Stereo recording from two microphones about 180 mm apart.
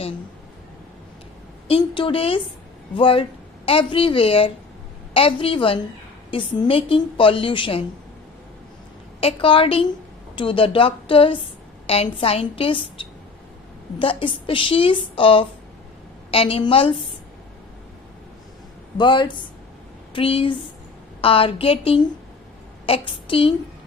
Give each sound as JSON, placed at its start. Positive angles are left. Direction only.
{"t": 1.6, "sound": "a woman's voice", "side_deg": 30}
{"t": 9.2, "sound": "a woman's voice", "side_deg": 30}
{"t": 18.9, "sound": "a woman's voice", "side_deg": 25}